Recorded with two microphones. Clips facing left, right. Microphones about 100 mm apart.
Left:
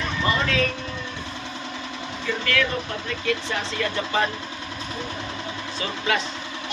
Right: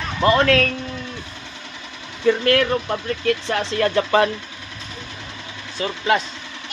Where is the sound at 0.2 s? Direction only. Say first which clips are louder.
Right 9 dB; 70° right (ahead or behind).